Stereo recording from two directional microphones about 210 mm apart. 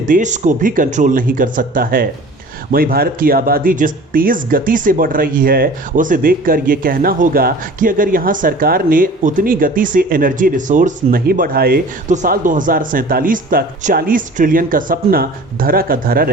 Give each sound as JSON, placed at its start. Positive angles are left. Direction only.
{"t": 0.0, "sound": "speech", "side_deg": -35}